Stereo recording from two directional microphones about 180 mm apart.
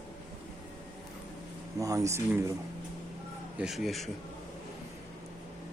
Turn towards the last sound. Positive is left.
turn(degrees=0)  # may be behind; listen again after turning